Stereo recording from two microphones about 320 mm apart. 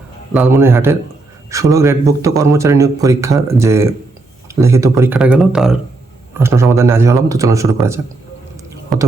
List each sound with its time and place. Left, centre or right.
0.3 s speech: centre